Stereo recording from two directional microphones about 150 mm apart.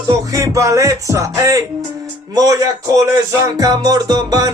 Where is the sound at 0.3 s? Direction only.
25° right (ahead or behind).